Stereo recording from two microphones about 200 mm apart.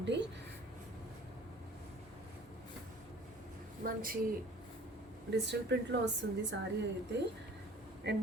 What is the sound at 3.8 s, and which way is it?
Speech, 45° right (ahead or behind).